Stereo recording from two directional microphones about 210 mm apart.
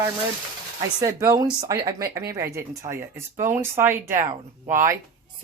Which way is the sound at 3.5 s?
10° right (ahead or behind).